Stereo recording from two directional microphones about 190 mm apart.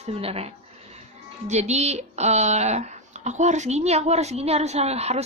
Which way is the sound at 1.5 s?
35° right (ahead or behind).